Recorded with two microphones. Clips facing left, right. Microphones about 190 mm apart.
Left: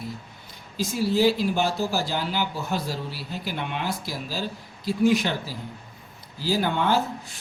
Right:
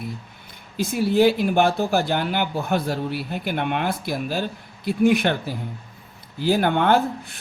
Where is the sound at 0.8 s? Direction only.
60° right (ahead or behind).